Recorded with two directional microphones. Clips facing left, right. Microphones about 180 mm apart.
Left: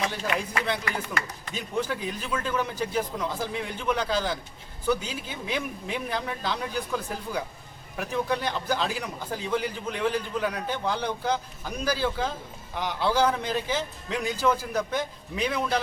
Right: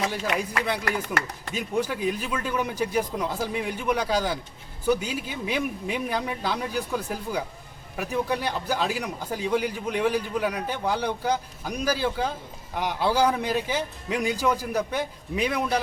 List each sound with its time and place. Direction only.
0.1 s speech: 10° right (ahead or behind)
0.9 s speech: 75° right (ahead or behind)
1.5 s speech: 10° right (ahead or behind)